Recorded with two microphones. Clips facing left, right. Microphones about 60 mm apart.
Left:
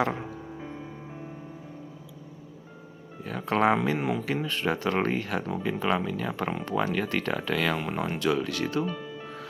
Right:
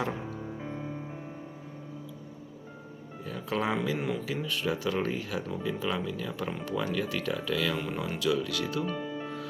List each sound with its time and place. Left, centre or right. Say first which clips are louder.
0.6 s music: right 1 dB; centre
3.2 s speech: left 7 dB; left
3.9 s speech: left 3 dB; left
4.4 s speech: left 3 dB; left
7.9 s speech: left 2 dB; left
8.9 s music: right 2 dB; centre